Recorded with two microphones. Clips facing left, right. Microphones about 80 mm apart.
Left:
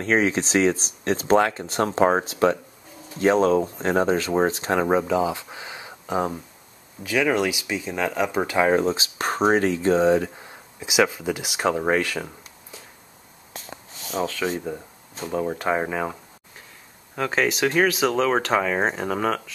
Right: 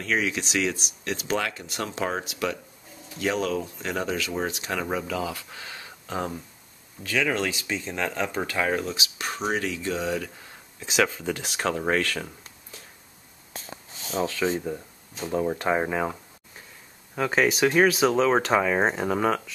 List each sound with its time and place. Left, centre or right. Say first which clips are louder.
0.0 s speech: left 6 dB; left
10.8 s speech: left 3 dB; centre
14.2 s speech: even; centre